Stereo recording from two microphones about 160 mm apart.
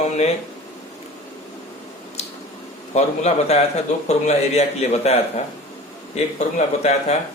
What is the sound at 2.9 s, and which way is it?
Speech, 45° left (ahead or behind).